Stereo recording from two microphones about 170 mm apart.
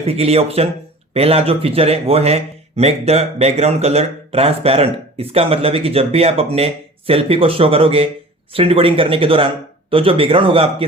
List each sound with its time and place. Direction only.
0.0 s a man's voice: 35° right (ahead or behind)